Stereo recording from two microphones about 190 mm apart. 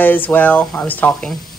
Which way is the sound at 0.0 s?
10° left (ahead or behind).